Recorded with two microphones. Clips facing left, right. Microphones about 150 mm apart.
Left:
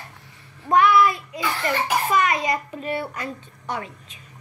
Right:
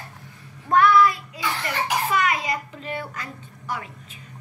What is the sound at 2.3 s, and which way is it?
A child's voice, 25° left (ahead or behind).